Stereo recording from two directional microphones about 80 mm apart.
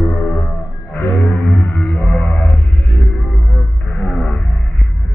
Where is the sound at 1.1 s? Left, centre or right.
Left.